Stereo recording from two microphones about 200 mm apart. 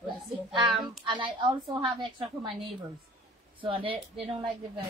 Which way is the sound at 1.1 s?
25° right (ahead or behind).